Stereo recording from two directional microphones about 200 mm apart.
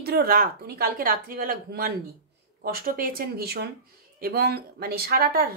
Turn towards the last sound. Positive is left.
turn(degrees=-50)  # may be behind; listen again after turning